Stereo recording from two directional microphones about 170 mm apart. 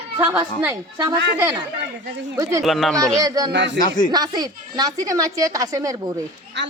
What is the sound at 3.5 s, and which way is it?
Speech, 90° right.